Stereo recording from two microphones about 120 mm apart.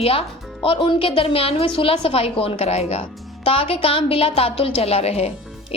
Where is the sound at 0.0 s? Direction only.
50° left (ahead or behind).